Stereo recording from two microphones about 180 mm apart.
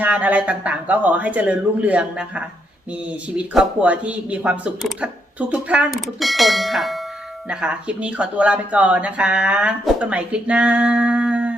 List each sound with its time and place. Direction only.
0.0 s speech: 10° right (ahead or behind)